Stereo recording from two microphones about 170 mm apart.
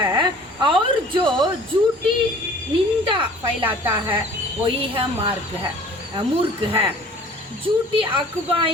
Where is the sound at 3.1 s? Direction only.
30° right (ahead or behind).